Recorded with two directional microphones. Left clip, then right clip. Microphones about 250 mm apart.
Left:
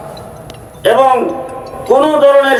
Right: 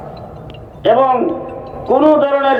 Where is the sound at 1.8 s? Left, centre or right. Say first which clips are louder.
Left 3 dB; left.